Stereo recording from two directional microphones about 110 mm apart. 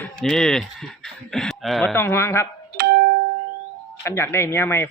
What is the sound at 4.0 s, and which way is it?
Speech, 25° left (ahead or behind).